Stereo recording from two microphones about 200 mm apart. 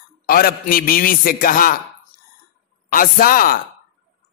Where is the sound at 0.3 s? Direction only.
45° left (ahead or behind).